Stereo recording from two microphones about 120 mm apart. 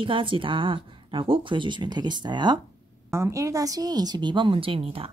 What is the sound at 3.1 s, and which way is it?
A woman's voice, 25° right (ahead or behind).